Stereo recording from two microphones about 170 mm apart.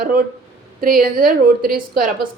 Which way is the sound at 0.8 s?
55° right (ahead or behind).